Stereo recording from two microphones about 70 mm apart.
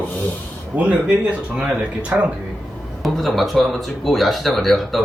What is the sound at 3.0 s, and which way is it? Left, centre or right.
Speech, centre.